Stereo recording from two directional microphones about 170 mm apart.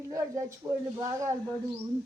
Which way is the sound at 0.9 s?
20° right (ahead or behind).